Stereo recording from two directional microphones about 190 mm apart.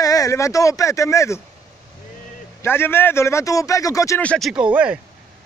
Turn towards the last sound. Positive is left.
turn(degrees=-5)  # may be behind; listen again after turning